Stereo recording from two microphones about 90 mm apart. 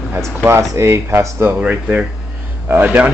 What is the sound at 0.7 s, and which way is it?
A man's voice, 30° right (ahead or behind).